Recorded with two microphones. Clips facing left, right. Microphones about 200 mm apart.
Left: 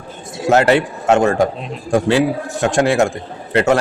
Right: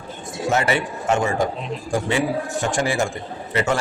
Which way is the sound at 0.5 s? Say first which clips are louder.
Left 9 dB; 70° left (ahead or behind).